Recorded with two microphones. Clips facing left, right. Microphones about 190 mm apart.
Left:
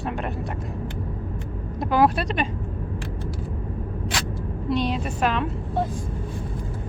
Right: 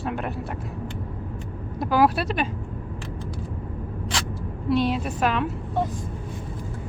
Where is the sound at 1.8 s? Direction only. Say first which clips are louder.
Even; centre (ahead or behind).